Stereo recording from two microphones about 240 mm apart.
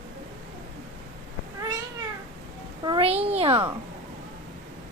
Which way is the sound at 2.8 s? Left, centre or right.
Right.